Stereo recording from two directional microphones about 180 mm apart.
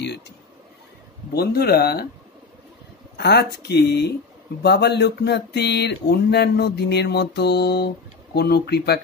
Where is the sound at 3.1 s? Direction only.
65° left (ahead or behind).